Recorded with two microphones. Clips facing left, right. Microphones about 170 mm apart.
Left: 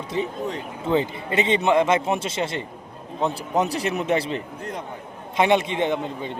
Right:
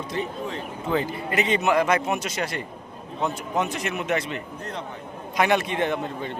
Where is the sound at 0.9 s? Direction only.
25° left (ahead or behind).